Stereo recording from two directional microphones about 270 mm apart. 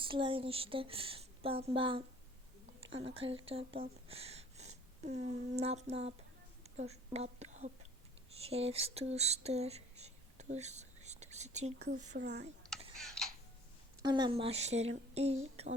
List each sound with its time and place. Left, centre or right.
0.0 s a woman's voice: centre
8.4 s a sound: right
12.1 s speech: right
13.0 s tick-tock: centre
14.0 s speech: centre